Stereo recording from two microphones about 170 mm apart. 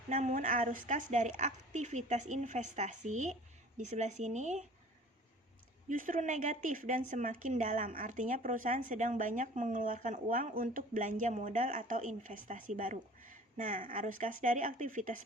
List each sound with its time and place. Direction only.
0.1 s speech: 45° right (ahead or behind)
5.9 s speech: 50° right (ahead or behind)